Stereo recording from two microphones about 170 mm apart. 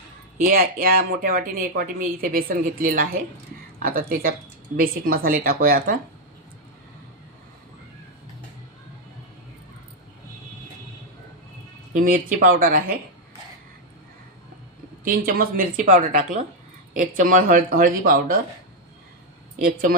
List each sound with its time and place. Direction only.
0.4 s speech: 60° right (ahead or behind)
11.9 s speech: 50° right (ahead or behind)
15.0 s speech: 55° right (ahead or behind)